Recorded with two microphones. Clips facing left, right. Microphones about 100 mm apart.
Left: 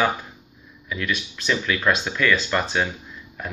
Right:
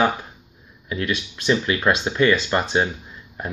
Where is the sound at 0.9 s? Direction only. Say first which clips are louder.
Right 2 dB; 25° right (ahead or behind).